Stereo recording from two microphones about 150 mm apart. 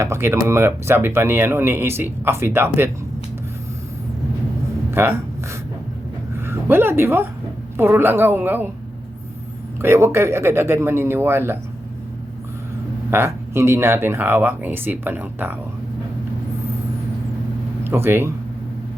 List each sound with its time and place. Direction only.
0.0 s speech: 15° right (ahead or behind)
4.9 s speech: 15° right (ahead or behind)
6.3 s a sound: 15° right (ahead or behind)
7.8 s speech: 15° right (ahead or behind)
9.8 s speech: 15° right (ahead or behind)
13.1 s speech: 15° right (ahead or behind)
17.8 s speech: 15° right (ahead or behind)